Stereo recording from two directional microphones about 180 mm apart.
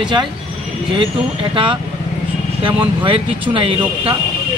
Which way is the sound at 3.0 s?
30° right (ahead or behind).